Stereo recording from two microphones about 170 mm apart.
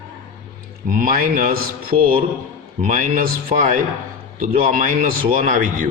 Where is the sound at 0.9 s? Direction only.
55° right (ahead or behind).